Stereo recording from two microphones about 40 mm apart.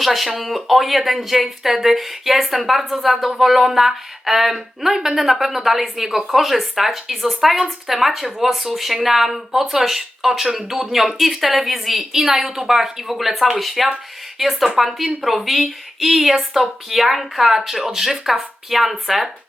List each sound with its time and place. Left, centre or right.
0.0 s speech: centre